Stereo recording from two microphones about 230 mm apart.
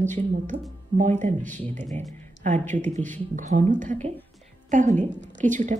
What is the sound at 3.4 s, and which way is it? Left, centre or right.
A woman's voice, right.